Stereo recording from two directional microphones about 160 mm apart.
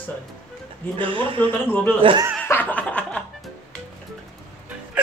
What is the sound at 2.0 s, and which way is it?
Speech, 35° right (ahead or behind).